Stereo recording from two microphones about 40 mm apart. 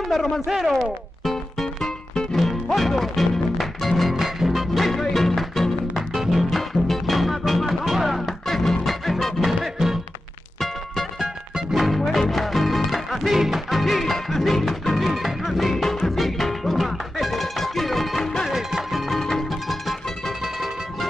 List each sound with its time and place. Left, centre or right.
0.1 s speech: centre
0.5 s speech: centre
1.2 s music: centre
8.5 s music: centre
11.7 s music: centre
18.5 s music: centre